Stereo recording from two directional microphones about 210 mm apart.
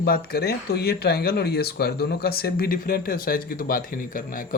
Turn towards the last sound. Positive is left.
turn(degrees=40)  # may be behind; listen again after turning